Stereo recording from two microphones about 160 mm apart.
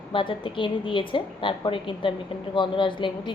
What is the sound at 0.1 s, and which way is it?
Speech, 30° left (ahead or behind).